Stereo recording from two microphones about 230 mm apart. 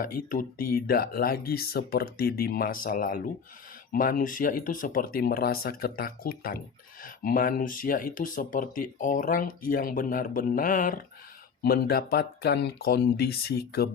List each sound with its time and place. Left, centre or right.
0.0 s speech: left